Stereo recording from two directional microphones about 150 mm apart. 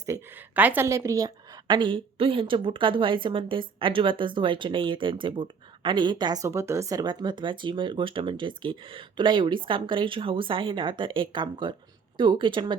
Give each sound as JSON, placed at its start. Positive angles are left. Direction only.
{"t": 0.5, "sound": "a woman's voice", "side_deg": -10}